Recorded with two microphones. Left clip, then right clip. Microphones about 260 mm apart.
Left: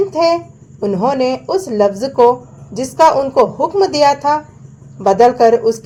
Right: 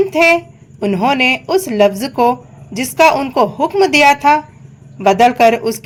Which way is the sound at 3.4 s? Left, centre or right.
Right.